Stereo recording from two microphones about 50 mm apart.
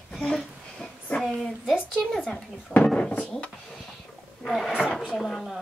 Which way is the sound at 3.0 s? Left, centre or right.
Left.